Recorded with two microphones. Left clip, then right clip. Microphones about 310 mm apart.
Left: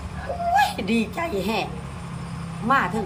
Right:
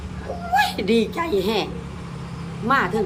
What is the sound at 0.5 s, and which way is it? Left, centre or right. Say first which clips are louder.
Speech: right 3 dB; centre.